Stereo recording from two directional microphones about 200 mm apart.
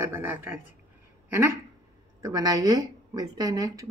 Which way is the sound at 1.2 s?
10° right (ahead or behind).